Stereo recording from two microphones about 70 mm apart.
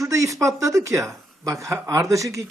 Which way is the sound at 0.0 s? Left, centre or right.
Right.